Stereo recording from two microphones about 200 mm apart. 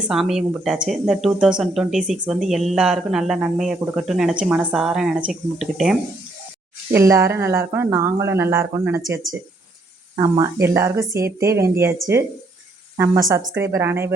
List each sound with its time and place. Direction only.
0.1 s speech: centre (ahead or behind)
6.9 s speech: 15° right (ahead or behind)
13.0 s speech: 15° right (ahead or behind)